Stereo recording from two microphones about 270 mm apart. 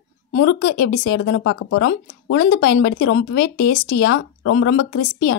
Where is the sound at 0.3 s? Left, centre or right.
Left.